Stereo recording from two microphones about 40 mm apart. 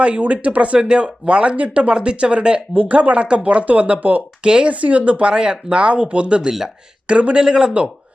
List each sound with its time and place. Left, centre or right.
0.0 s speech: right
2.7 s speech: right
5.3 s speech: right
7.3 s speech: centre